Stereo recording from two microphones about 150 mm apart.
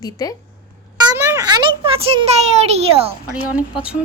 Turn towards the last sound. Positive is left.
turn(degrees=-5)  # may be behind; listen again after turning